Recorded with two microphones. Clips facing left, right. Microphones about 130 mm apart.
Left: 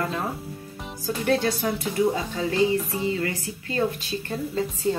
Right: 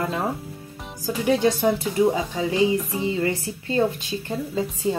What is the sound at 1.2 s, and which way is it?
A woman's voice, 10° right (ahead or behind).